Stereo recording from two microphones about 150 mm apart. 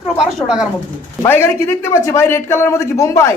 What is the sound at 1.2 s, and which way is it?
A man's voice, 15° left (ahead or behind).